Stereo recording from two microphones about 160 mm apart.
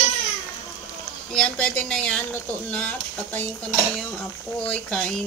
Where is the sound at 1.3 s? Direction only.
5° left (ahead or behind).